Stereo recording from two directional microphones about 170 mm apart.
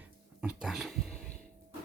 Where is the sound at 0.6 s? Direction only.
Centre (ahead or behind).